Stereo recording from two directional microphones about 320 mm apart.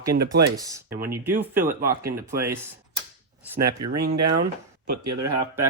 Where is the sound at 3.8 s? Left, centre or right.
Right.